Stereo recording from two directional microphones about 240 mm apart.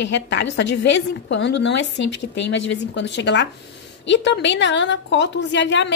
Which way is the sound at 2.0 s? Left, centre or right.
Left.